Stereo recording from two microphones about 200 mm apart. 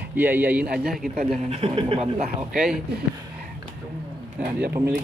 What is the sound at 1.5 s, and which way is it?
Speech, 30° right (ahead or behind).